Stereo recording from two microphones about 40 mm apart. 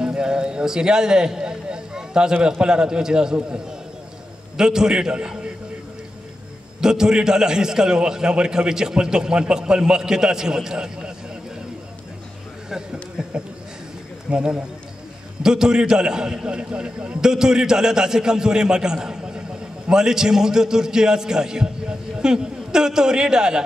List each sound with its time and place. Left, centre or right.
0.0 s a sound: right
2.6 s a man's voice: right
3.3 s a man's voice: right
4.6 s a man's voice: centre
6.8 s a man's voice: centre
14.3 s a man's voice: right
17.2 s a man's voice: centre